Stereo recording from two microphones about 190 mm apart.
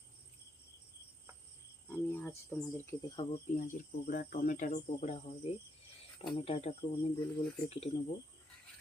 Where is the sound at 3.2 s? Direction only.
25° left (ahead or behind).